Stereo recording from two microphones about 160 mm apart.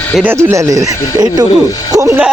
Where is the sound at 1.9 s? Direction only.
20° right (ahead or behind).